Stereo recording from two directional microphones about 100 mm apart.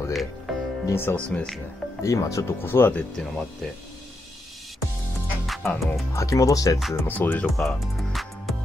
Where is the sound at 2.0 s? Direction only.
30° left (ahead or behind).